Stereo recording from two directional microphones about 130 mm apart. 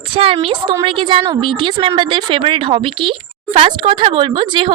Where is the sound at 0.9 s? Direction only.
40° right (ahead or behind).